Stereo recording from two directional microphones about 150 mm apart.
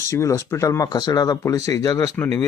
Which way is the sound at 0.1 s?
20° left (ahead or behind).